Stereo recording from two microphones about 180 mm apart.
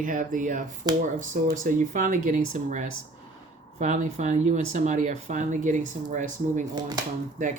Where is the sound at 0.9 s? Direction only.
20° right (ahead or behind).